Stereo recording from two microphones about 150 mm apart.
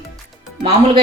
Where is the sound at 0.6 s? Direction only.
40° right (ahead or behind).